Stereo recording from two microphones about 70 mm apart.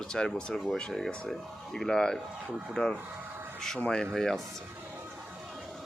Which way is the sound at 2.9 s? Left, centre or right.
Right.